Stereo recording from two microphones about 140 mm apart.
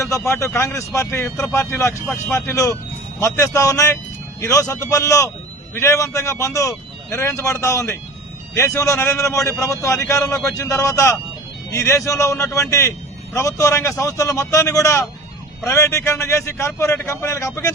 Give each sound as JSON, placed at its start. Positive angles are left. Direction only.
{"t": 0.0, "sound": "a man's voice", "side_deg": 20}